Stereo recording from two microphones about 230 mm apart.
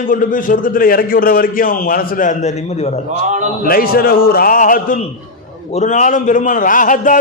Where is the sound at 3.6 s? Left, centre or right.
Left.